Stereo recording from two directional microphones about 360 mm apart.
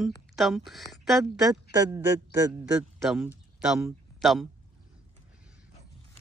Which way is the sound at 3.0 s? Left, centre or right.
Centre.